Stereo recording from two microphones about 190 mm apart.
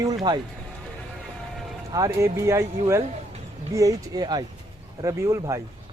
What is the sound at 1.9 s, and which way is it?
Speech, 20° right (ahead or behind).